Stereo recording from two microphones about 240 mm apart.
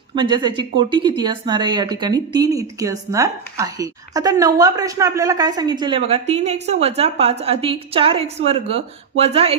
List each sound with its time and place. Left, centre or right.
0.1 s speech: centre